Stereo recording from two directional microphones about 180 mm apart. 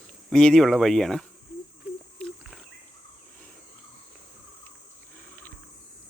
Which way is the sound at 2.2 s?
5° left (ahead or behind).